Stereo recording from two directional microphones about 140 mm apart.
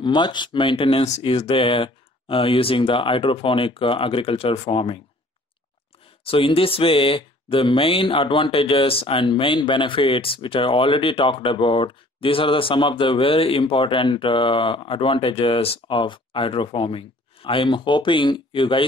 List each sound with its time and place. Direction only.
0.0 s speech: 35° left (ahead or behind)
6.2 s speech: 40° left (ahead or behind)